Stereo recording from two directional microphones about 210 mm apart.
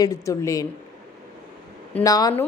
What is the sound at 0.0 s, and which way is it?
Speech, 15° left (ahead or behind).